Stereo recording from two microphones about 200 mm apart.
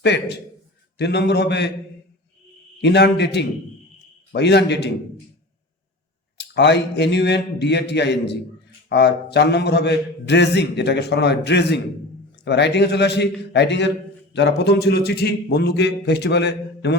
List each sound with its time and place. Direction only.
0.0 s a man's voice: 55° left (ahead or behind)
2.8 s a man's voice: 60° left (ahead or behind)
6.4 s a man's voice: 60° left (ahead or behind)